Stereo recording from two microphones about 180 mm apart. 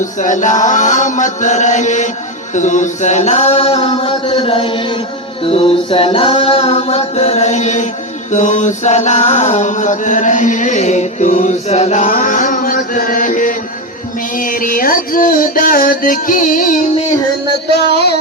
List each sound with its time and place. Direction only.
0.0 s chant: 45° left (ahead or behind)
2.6 s singing: 45° left (ahead or behind)
8.3 s chant: 40° left (ahead or behind)